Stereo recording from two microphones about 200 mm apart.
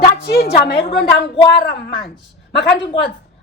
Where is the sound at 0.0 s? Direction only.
50° left (ahead or behind).